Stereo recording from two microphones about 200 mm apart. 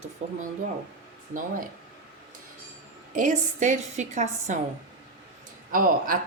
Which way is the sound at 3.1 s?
35° right (ahead or behind).